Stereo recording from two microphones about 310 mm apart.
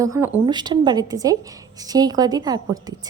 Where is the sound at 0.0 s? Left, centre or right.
Centre.